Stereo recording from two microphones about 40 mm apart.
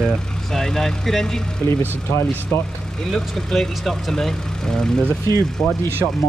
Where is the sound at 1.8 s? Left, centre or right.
Left.